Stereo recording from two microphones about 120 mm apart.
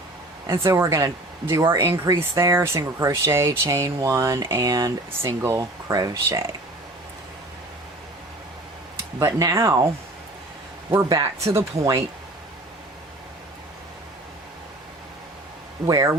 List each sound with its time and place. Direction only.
0.4 s speech: 25° right (ahead or behind)
9.1 s speech: 25° right (ahead or behind)
10.9 s speech: 25° right (ahead or behind)